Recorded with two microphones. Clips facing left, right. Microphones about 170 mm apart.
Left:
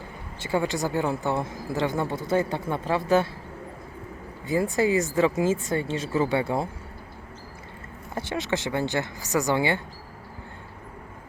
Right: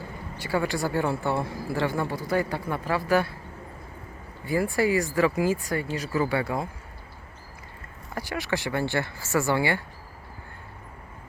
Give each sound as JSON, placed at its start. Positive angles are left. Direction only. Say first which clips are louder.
{"t": 0.3, "sound": "a woman's voice", "louder": "left 1 dB", "side_deg": 20}
{"t": 4.4, "sound": "a woman's voice", "louder": "left 1 dB", "side_deg": 20}
{"t": 8.1, "sound": "a woman's voice", "louder": "left 1 dB", "side_deg": 25}